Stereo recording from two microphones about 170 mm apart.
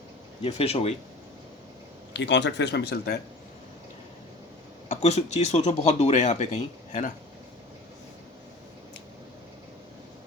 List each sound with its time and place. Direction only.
0.4 s speech: 35° left (ahead or behind)
2.1 s speech: 90° left
4.9 s speech: 40° left (ahead or behind)